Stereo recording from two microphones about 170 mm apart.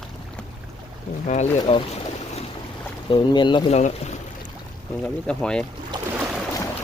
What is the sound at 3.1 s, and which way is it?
Speech, 30° left (ahead or behind).